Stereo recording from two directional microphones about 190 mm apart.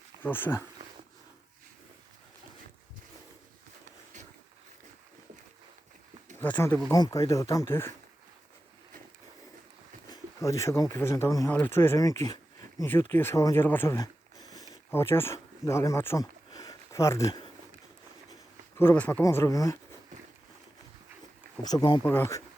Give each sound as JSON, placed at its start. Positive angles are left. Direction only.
{"t": 0.2, "sound": "speech", "side_deg": 10}
{"t": 6.4, "sound": "speech", "side_deg": 10}
{"t": 10.1, "sound": "speech", "side_deg": 15}
{"t": 18.8, "sound": "speech", "side_deg": 10}
{"t": 21.6, "sound": "speech", "side_deg": 20}